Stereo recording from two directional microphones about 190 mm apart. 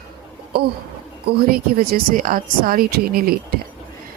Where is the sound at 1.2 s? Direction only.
50° right (ahead or behind).